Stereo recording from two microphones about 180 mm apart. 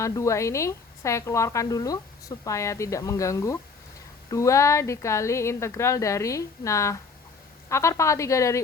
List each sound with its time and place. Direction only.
0.0 s a woman's voice: 15° left (ahead or behind)